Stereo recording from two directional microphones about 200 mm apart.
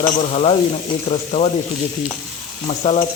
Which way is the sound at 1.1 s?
30° left (ahead or behind).